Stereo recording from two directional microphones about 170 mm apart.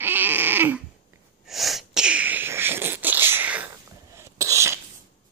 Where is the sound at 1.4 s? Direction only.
Centre (ahead or behind); by 4.8 s 15° right (ahead or behind).